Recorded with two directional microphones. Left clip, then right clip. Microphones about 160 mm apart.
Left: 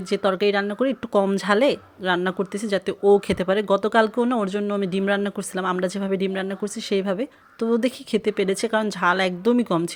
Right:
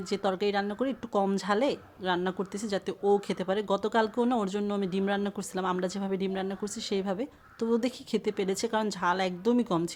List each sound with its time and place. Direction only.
0.1 s a woman's voice: 15° left (ahead or behind)